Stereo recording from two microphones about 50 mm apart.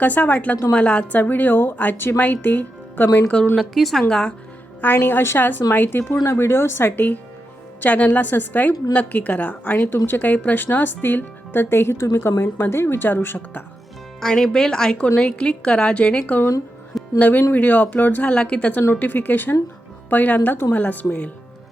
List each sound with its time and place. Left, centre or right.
0.0 s a woman's voice: left
3.5 s a woman's voice: centre
4.1 s speech: centre
5.0 s speech: left
6.9 s a woman's voice: left
9.7 s speech: left
13.1 s speech: left
14.2 s a woman's voice: centre; by 18.3 s left
18.3 s a woman's voice: left
18.9 s a woman's voice: left